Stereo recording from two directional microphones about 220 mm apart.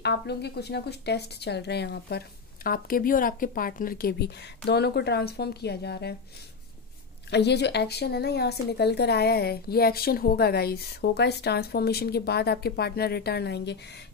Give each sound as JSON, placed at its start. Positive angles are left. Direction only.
{"t": 0.0, "sound": "a woman's voice", "side_deg": 50}
{"t": 7.2, "sound": "a woman's voice", "side_deg": 50}